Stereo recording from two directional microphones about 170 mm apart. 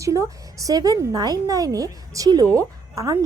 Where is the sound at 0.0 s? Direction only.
20° right (ahead or behind).